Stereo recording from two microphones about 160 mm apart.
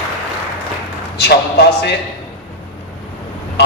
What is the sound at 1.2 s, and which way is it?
Speech, 90° left.